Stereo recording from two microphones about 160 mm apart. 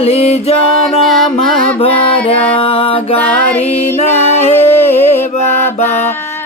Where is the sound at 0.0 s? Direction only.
40° left (ahead or behind).